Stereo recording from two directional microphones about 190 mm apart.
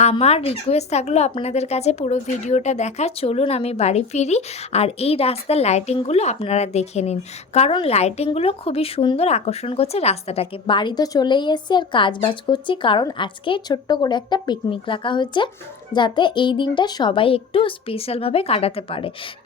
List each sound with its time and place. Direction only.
0.0 s a child's voice: 35° left (ahead or behind)